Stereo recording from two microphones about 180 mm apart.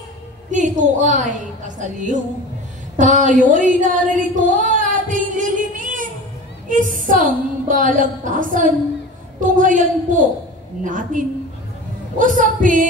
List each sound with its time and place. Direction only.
0.5 s a woman's voice: 45° right (ahead or behind)
4.4 s singing: 45° right (ahead or behind)
6.7 s a woman's voice: 45° right (ahead or behind)